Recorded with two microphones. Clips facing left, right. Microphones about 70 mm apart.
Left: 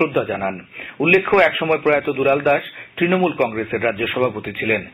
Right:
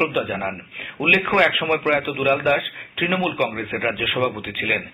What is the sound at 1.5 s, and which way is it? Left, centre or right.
Speech, left.